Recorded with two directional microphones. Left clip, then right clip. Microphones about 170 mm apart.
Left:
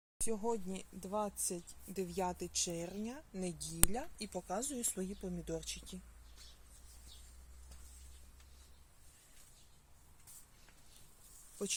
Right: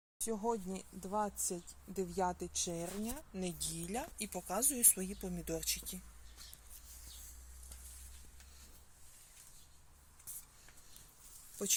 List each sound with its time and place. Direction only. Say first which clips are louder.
0.2 s speech: right 1 dB; 10° left (ahead or behind)